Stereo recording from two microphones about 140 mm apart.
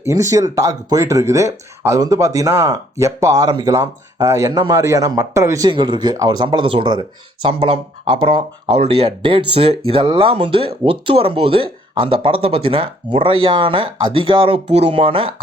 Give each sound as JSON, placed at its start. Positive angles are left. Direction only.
{"t": 0.0, "sound": "speech", "side_deg": -20}